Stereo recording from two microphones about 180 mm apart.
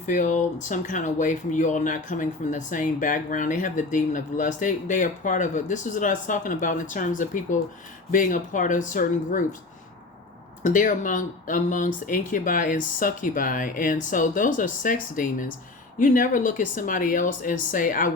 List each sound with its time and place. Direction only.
0.0 s speech: 45° left (ahead or behind)
10.6 s speech: 45° left (ahead or behind)